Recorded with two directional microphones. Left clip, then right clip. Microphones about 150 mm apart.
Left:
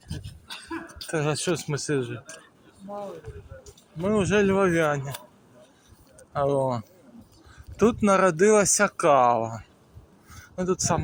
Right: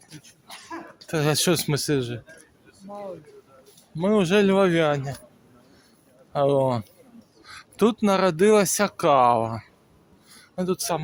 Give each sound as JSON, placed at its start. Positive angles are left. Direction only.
{"t": 1.2, "sound": "speech", "side_deg": -80}
{"t": 3.9, "sound": "speech", "side_deg": -70}
{"t": 6.3, "sound": "speech", "side_deg": -55}
{"t": 8.0, "sound": "speech", "side_deg": -20}
{"t": 9.2, "sound": "speech", "side_deg": -40}
{"t": 10.5, "sound": "speech", "side_deg": -35}